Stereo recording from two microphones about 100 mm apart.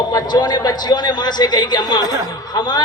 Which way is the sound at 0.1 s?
40° left (ahead or behind).